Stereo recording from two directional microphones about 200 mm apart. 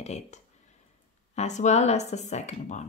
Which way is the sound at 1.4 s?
35° left (ahead or behind).